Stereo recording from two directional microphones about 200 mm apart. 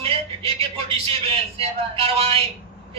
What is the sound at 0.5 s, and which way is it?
A man's voice, 25° right (ahead or behind).